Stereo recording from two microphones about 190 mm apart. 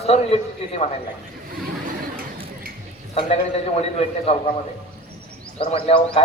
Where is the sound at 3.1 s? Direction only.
30° left (ahead or behind).